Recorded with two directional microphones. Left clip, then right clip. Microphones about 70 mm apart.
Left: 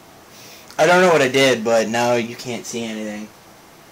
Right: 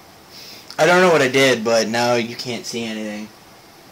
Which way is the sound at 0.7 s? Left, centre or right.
Right.